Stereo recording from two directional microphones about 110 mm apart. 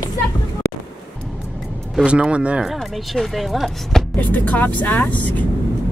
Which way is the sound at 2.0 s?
10° right (ahead or behind).